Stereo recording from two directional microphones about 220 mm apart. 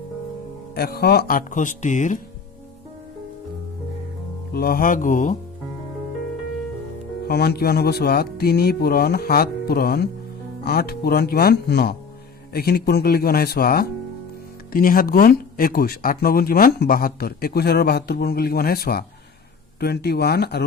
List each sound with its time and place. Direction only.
0.8 s speech: 45° left (ahead or behind)
4.5 s speech: 45° left (ahead or behind)
7.3 s speech: 45° left (ahead or behind)